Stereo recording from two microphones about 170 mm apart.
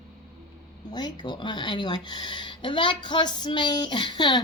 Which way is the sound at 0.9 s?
25° left (ahead or behind).